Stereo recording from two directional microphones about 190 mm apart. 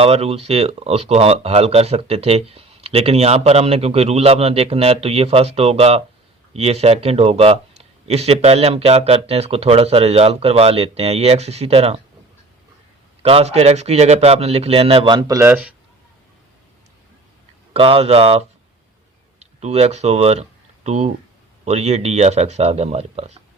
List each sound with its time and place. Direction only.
0.0 s speech: 30° right (ahead or behind)
13.2 s speech: 30° right (ahead or behind); by 15.7 s 10° right (ahead or behind)
17.7 s speech: 30° right (ahead or behind)